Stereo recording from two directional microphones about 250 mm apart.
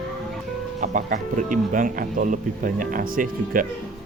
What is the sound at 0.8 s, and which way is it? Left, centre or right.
Speech, right.